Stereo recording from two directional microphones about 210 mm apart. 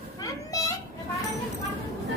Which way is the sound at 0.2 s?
15° left (ahead or behind).